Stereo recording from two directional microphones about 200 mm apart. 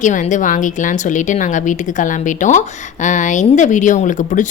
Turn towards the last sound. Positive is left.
turn(degrees=40)  # may be behind; listen again after turning